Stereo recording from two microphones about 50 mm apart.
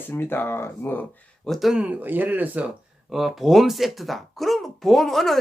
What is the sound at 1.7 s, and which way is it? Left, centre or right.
Speech, right.